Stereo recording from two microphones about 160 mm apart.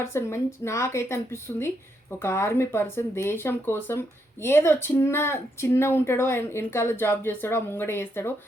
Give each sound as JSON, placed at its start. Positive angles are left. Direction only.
{"t": 0.0, "sound": "a woman's voice", "side_deg": 15}